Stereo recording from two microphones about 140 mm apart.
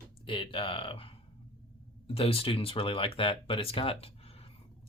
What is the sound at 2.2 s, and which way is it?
Speech, 45° left (ahead or behind).